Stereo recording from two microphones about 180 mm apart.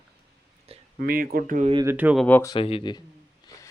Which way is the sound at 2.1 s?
10° left (ahead or behind).